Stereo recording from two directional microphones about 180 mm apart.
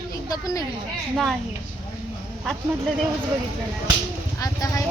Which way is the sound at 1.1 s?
Centre (ahead or behind).